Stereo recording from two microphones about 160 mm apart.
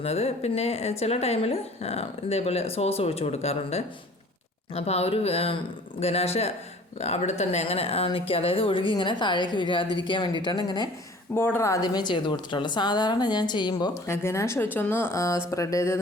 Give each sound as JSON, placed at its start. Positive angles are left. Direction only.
{"t": 0.0, "sound": "a woman's voice", "side_deg": 40}
{"t": 11.3, "sound": "a woman's voice", "side_deg": 15}